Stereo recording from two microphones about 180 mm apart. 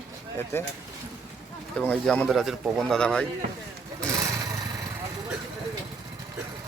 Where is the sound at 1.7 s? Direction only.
5° left (ahead or behind).